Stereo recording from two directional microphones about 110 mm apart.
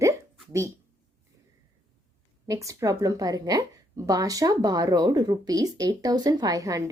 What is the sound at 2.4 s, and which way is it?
Speech, 30° right (ahead or behind).